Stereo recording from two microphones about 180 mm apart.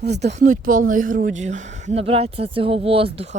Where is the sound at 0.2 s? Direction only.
40° right (ahead or behind).